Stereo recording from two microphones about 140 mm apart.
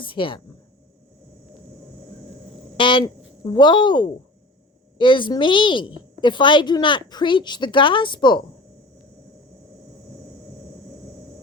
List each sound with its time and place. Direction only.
0.0 s a woman's voice: 40° left (ahead or behind)
2.7 s a sound: 35° left (ahead or behind)
3.5 s a woman's voice: 35° left (ahead or behind)